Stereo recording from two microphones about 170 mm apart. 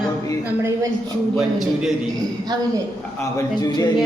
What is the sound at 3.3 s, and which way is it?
Speech, 25° left (ahead or behind).